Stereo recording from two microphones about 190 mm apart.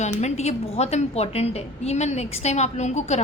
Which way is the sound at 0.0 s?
35° left (ahead or behind).